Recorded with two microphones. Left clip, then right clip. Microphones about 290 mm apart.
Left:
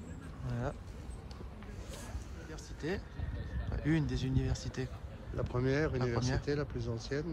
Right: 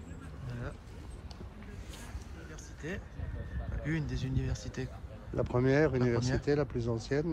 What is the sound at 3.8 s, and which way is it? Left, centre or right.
Speech, centre.